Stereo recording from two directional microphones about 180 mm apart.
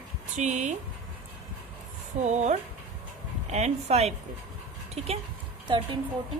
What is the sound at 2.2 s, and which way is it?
A woman's voice, 40° right (ahead or behind).